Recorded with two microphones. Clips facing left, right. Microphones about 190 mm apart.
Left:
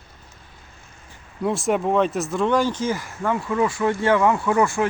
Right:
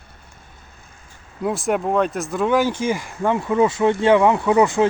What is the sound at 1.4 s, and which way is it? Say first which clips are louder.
Speech: even; centre (ahead or behind).